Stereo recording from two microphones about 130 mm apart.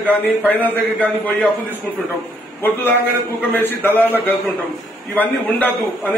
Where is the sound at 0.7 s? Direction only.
15° left (ahead or behind).